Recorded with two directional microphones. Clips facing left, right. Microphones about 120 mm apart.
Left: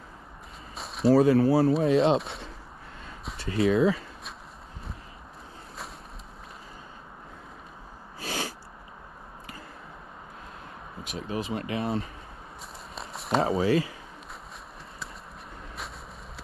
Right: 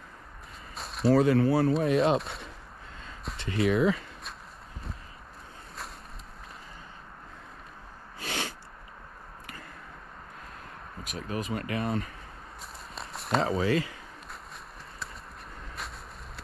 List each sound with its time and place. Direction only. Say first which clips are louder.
0.7 s a sound: left 2 dB; centre (ahead or behind)
1.1 s speech: left 3 dB; 30° left (ahead or behind)
2.1 s speech: left 2 dB; centre (ahead or behind)
3.4 s speech: left 2 dB; 30° left (ahead or behind)
8.2 s snort: left 2 dB; 30° left (ahead or behind)
11.1 s speech: left 2 dB; 30° left (ahead or behind)
12.9 s a sound: left 1 dB; centre (ahead or behind)
13.6 s speech: left 3 dB; 25° left (ahead or behind)